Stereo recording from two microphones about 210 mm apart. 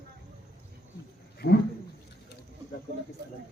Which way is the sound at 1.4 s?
55° left (ahead or behind).